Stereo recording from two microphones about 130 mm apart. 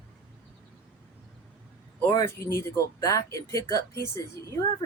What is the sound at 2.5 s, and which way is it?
Speech, 25° left (ahead or behind).